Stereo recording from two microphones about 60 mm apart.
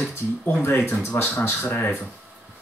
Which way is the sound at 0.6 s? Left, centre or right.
Left.